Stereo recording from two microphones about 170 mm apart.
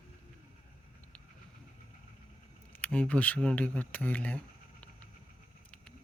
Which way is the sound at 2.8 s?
5° left (ahead or behind).